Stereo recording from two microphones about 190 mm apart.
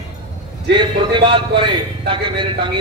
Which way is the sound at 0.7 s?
25° right (ahead or behind).